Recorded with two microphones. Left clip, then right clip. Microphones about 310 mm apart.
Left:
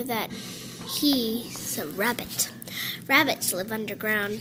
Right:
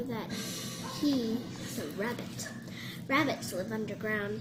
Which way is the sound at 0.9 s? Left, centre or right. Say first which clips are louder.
Left 7 dB; left.